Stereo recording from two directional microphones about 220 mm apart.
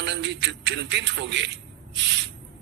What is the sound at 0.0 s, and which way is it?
A man's voice, 55° right (ahead or behind).